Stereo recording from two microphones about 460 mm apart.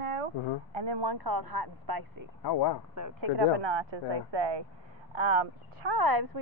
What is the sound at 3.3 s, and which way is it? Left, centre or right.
Speech, right.